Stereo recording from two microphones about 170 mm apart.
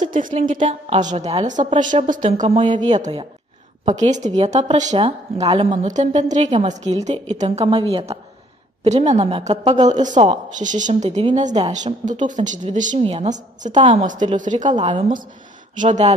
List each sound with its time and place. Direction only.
0.0 s a woman's voice: 45° right (ahead or behind); by 2.8 s 30° right (ahead or behind)
2.8 s a woman's voice: 45° right (ahead or behind)
5.9 s a woman's voice: 45° right (ahead or behind)
10.1 s a woman's voice: 25° right (ahead or behind)
10.6 s a woman's voice: 45° right (ahead or behind)
13.0 s a woman's voice: 35° right (ahead or behind)
13.7 s a woman's voice: 30° right (ahead or behind)
14.3 s a woman's voice: 45° right (ahead or behind)
15.8 s a woman's voice: 45° right (ahead or behind)